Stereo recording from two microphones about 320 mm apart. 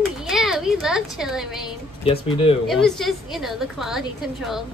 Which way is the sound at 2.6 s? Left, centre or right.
Centre.